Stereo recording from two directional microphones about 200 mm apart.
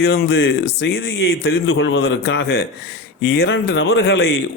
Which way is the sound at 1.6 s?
75° left (ahead or behind).